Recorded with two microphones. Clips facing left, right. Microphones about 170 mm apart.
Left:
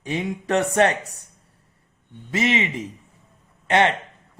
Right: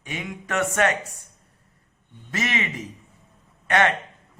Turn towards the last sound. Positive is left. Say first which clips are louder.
# left 2 dB
turn(degrees=20)  # may be behind; listen again after turning